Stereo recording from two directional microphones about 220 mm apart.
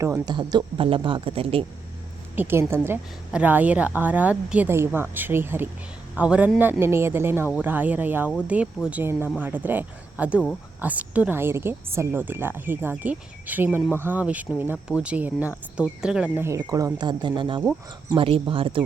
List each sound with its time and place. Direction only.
0.0 s speech: 15° right (ahead or behind)
2.3 s a woman's voice: 10° right (ahead or behind)